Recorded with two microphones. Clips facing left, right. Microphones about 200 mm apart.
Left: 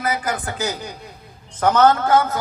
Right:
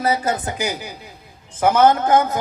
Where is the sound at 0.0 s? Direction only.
25° right (ahead or behind).